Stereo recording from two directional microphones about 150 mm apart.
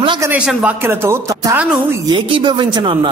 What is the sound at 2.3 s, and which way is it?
Speech, 35° right (ahead or behind).